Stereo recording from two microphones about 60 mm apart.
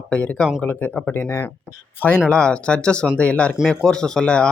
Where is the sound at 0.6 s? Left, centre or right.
Left.